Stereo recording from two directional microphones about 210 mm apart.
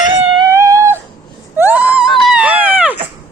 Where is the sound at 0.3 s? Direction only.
15° right (ahead or behind).